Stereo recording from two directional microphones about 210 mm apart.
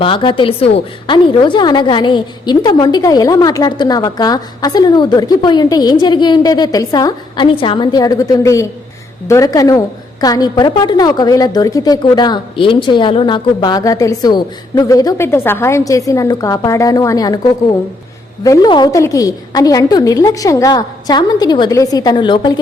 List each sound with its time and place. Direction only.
0.0 s a woman's voice: 25° left (ahead or behind)